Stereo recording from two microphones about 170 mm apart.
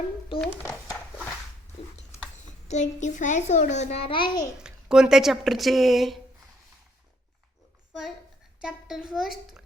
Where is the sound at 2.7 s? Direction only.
45° left (ahead or behind); by 4.4 s 30° left (ahead or behind).